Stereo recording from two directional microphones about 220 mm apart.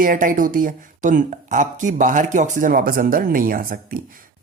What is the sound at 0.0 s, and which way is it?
Speech, 40° right (ahead or behind).